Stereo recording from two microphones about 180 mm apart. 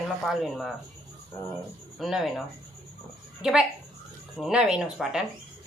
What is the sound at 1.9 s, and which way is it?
Speech, centre (ahead or behind).